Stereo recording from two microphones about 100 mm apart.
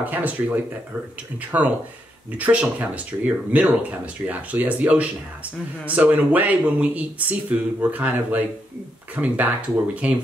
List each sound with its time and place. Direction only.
0.0 s speech: 15° right (ahead or behind)